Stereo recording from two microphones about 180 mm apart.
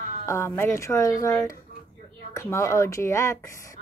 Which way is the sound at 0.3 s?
15° left (ahead or behind).